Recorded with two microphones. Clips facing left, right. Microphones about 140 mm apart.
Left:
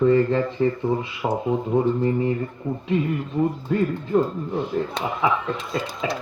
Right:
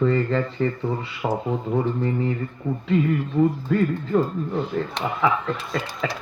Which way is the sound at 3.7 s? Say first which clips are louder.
Even; 15° left (ahead or behind).